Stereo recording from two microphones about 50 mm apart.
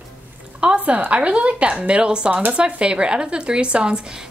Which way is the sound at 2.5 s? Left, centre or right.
Right.